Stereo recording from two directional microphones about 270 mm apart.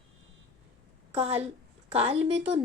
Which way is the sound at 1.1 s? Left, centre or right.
Right.